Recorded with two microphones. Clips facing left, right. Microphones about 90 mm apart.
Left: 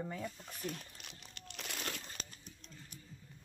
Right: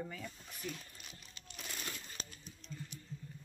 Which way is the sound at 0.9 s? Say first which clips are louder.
Left 1 dB; 70° left (ahead or behind).